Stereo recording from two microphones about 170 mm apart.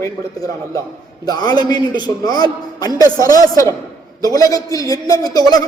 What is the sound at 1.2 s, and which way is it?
A man's voice, 25° left (ahead or behind).